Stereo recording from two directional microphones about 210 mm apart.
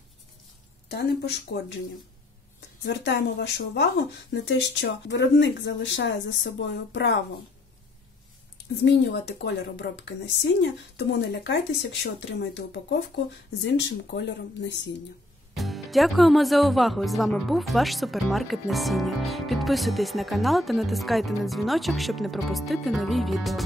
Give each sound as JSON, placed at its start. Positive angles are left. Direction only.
{"t": 0.8, "sound": "speech", "side_deg": 50}
{"t": 2.8, "sound": "speech", "side_deg": 55}
{"t": 8.8, "sound": "speech", "side_deg": 55}
{"t": 15.5, "sound": "speech", "side_deg": 0}